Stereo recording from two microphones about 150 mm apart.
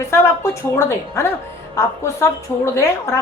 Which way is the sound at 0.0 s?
20° left (ahead or behind).